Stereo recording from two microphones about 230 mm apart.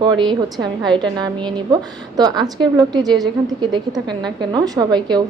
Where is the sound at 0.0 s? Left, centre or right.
Centre.